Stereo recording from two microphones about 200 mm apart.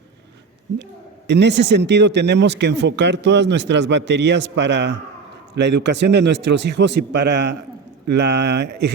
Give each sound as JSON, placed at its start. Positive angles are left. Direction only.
{"t": 1.3, "sound": "speech", "side_deg": -60}